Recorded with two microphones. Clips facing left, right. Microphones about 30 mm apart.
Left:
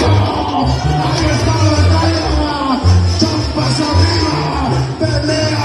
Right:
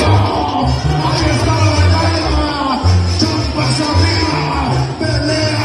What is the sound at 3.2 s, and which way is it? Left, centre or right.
Music, right.